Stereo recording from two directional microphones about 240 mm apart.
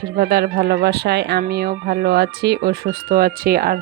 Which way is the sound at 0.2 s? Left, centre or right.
Right.